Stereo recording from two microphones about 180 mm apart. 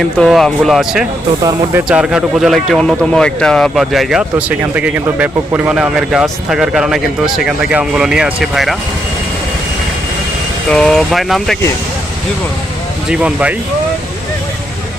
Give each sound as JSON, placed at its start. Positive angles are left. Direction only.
{"t": 0.2, "sound": "speech", "side_deg": 0}
{"t": 10.7, "sound": "speech", "side_deg": 5}
{"t": 13.1, "sound": "speech", "side_deg": -5}